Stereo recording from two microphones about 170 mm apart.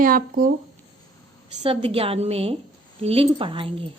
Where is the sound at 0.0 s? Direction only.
55° right (ahead or behind).